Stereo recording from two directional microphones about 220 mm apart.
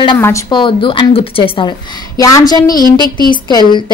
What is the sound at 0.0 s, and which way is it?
A woman's voice, 15° left (ahead or behind).